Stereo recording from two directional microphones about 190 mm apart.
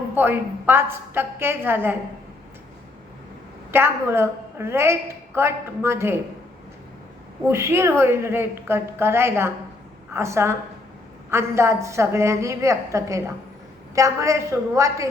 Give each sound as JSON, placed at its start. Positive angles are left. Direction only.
{"t": 0.2, "sound": "a woman's voice", "side_deg": -10}
{"t": 3.7, "sound": "a woman's voice", "side_deg": -10}
{"t": 7.4, "sound": "a woman's voice", "side_deg": -15}